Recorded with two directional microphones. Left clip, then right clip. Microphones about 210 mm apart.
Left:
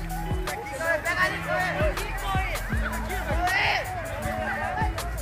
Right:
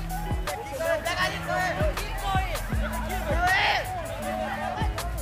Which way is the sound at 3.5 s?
25° right (ahead or behind).